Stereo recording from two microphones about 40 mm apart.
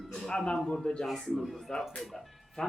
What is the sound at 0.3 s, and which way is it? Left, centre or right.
Speech, left.